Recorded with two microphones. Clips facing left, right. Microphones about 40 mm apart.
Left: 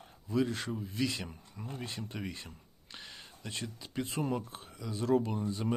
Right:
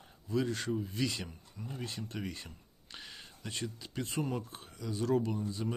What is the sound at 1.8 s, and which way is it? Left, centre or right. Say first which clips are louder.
Speech: right 1 dB; centre.